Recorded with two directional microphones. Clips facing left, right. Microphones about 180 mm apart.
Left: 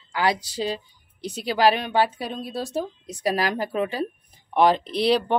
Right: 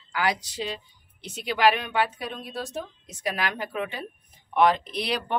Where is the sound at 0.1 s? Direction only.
30° left (ahead or behind).